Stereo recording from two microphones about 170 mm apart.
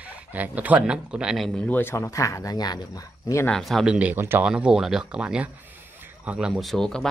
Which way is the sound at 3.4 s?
Centre (ahead or behind).